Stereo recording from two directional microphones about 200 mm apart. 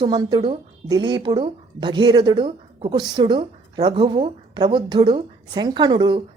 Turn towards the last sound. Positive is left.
turn(degrees=-25)  # may be behind; listen again after turning